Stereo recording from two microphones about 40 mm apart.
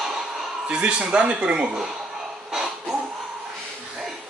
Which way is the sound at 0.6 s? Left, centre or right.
Right.